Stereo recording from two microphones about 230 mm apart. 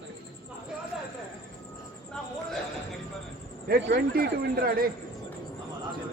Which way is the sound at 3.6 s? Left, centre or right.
Right.